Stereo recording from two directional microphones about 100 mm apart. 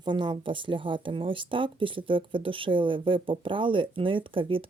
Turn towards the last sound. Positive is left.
turn(degrees=-60)  # may be behind; listen again after turning